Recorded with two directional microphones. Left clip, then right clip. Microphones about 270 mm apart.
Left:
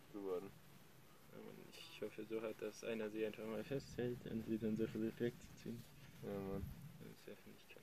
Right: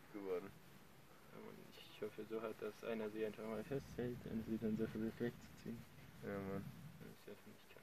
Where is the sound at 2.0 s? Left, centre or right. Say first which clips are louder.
Even; left.